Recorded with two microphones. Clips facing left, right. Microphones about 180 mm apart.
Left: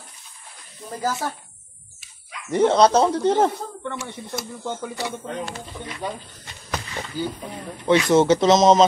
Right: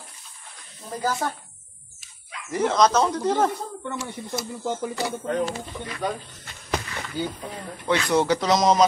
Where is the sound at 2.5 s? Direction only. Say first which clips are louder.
Left 4 dB; 30° left (ahead or behind).